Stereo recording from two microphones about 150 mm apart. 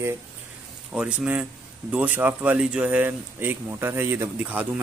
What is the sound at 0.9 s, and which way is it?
Speech, 10° right (ahead or behind).